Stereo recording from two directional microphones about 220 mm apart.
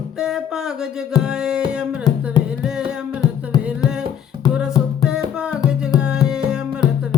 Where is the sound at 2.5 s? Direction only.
5° right (ahead or behind).